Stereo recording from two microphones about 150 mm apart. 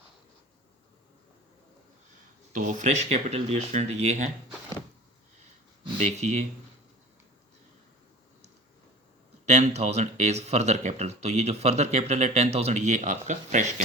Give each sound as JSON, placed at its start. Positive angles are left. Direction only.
{"t": 2.5, "sound": "speech", "side_deg": -55}
{"t": 6.0, "sound": "speech", "side_deg": -50}
{"t": 9.5, "sound": "speech", "side_deg": -50}